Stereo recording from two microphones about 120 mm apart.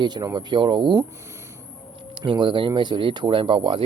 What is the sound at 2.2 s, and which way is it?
Speech, 40° right (ahead or behind).